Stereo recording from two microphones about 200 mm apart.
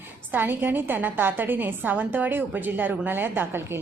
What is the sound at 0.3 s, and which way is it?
A woman's voice, 10° right (ahead or behind).